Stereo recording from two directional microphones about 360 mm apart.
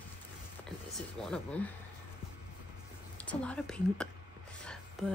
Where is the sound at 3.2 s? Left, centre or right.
Centre.